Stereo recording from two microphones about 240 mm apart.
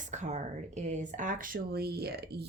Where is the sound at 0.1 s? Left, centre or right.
Right.